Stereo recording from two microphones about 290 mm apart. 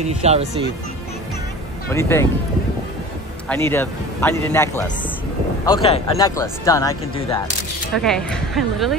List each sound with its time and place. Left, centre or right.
0.2 s speech: right
1.9 s speech: centre
3.4 s speech: centre